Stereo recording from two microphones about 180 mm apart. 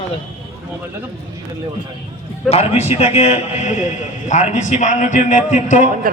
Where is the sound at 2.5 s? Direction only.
35° left (ahead or behind).